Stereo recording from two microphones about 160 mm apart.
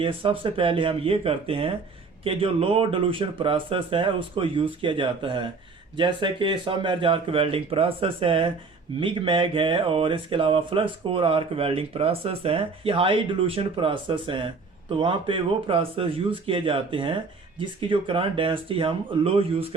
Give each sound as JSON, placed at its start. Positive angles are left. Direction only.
{"t": 0.0, "sound": "speech", "side_deg": -35}